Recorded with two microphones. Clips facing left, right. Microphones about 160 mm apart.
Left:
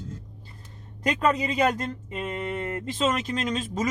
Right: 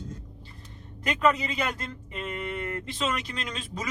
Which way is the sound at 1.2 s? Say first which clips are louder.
Left 2 dB; 40° left (ahead or behind).